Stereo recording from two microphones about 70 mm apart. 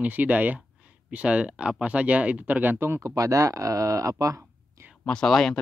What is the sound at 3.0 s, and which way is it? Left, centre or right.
Speech, right.